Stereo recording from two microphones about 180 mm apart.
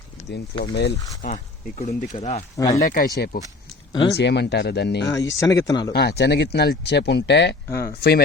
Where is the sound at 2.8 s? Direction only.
50° left (ahead or behind).